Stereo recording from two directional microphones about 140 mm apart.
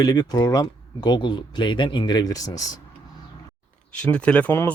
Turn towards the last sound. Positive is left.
turn(degrees=10)  # may be behind; listen again after turning